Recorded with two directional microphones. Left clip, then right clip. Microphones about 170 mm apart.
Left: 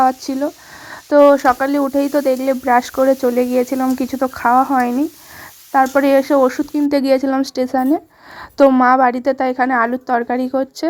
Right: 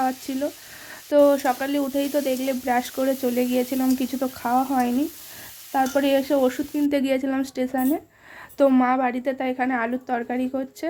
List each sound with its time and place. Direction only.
0.0 s a woman's voice: 25° left (ahead or behind)
3.2 s speech: 10° left (ahead or behind)
4.2 s a woman's voice: 25° left (ahead or behind)
4.8 s a woman's voice: 10° left (ahead or behind)
6.1 s a woman's voice: 30° left (ahead or behind)
9.6 s a woman's voice: 25° left (ahead or behind)